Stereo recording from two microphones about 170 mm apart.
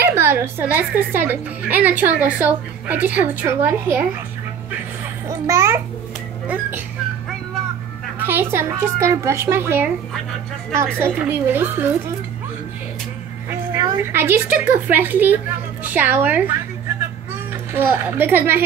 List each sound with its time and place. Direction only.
0.0 s speech: 15° right (ahead or behind)
5.5 s speech: 15° right (ahead or behind)
8.2 s speech: 15° right (ahead or behind)
11.0 s speech: 10° right (ahead or behind)
13.5 s a woman's voice: 15° right (ahead or behind)
17.7 s speech: 10° right (ahead or behind)